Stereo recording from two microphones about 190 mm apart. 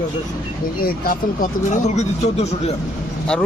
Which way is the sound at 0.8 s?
50° left (ahead or behind).